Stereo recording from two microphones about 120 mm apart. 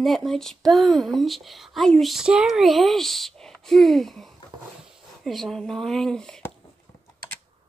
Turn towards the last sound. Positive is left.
turn(degrees=5)  # may be behind; listen again after turning